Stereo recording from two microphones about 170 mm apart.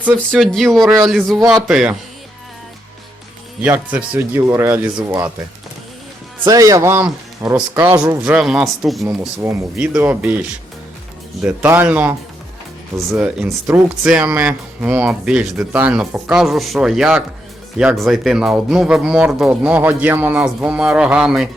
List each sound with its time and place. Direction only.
0.0 s speech: 5° right (ahead or behind)
3.6 s a man's voice: 5° right (ahead or behind)
6.4 s a man's voice: 20° right (ahead or behind)
8.2 s speech: 5° right (ahead or behind)
9.0 s a man's voice: 15° right (ahead or behind)
11.4 s a man's voice: 10° right (ahead or behind)
13.1 s a man's voice: 10° right (ahead or behind)